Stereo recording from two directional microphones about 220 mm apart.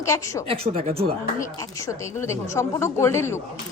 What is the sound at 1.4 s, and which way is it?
A woman's voice, 15° left (ahead or behind).